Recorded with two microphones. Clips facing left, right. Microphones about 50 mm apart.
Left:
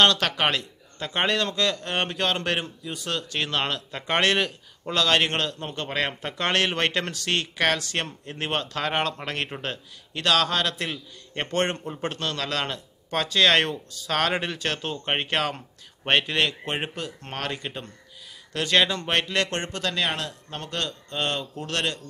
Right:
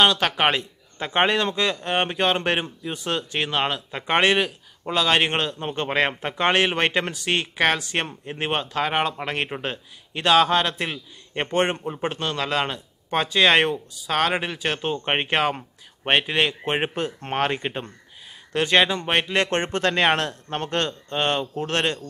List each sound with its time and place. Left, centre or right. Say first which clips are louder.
0.0 s a man's voice: right 2 dB; centre; by 22.0 s right